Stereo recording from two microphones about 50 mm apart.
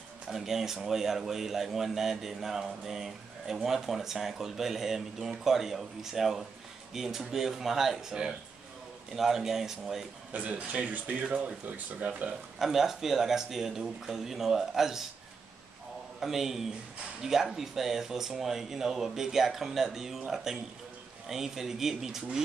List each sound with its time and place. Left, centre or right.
0.3 s a man's voice: centre
9.1 s a man's voice: centre
10.3 s speech: right
12.5 s a man's voice: centre
16.2 s a man's voice: centre